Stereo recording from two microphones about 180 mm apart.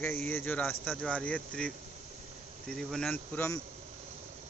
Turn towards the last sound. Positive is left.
turn(degrees=15)  # may be behind; listen again after turning